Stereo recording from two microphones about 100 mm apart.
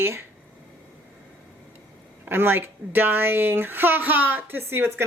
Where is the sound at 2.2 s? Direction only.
20° right (ahead or behind).